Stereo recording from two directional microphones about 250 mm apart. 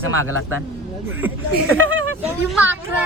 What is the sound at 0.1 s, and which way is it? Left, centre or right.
Speech, right.